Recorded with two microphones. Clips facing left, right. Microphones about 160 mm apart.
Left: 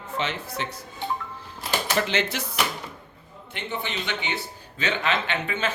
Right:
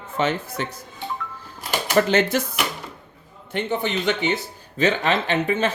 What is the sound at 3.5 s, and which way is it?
A man's voice, 45° right (ahead or behind).